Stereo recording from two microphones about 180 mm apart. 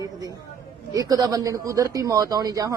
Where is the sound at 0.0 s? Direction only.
20° right (ahead or behind).